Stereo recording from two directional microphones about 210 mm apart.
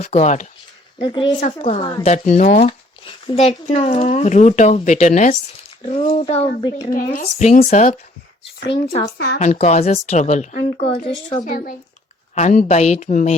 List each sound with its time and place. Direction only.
0.0 s a woman's voice: 30° left (ahead or behind)
2.6 s a sound: 25° left (ahead or behind)
3.7 s a woman's voice: 30° left (ahead or behind)
7.2 s a woman's voice: 35° left (ahead or behind)
9.1 s speech: 50° left (ahead or behind)
9.4 s speech: 35° left (ahead or behind)